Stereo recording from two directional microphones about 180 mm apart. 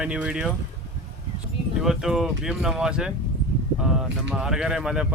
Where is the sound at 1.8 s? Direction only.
Centre (ahead or behind).